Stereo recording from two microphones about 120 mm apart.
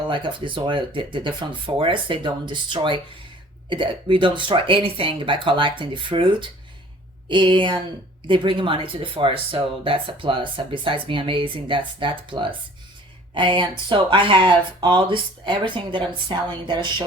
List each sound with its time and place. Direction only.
0.1 s speech: 45° right (ahead or behind)